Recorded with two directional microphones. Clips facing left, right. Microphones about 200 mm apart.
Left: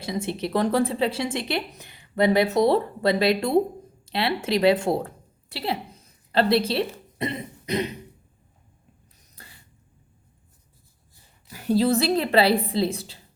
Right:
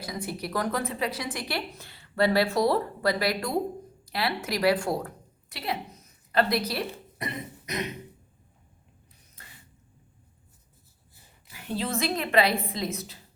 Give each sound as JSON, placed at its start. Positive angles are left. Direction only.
{"t": 0.0, "sound": "a woman's voice", "side_deg": 25}
{"t": 11.5, "sound": "a woman's voice", "side_deg": 40}